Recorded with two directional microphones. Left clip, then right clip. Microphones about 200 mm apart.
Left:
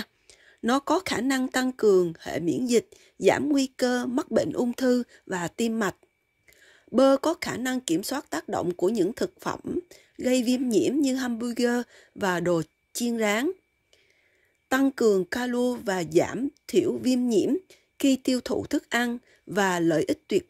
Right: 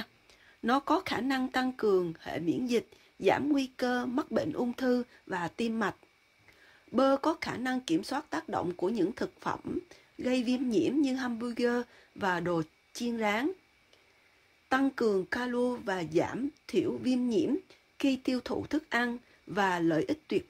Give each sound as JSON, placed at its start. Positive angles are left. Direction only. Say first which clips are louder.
{"t": 0.0, "sound": "speech", "louder": "left 4 dB", "side_deg": 45}
{"t": 14.7, "sound": "speech", "louder": "left 6 dB", "side_deg": 50}